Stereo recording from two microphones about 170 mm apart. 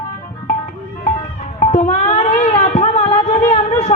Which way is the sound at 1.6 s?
45° left (ahead or behind).